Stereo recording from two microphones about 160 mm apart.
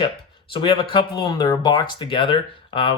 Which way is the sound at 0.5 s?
30° left (ahead or behind).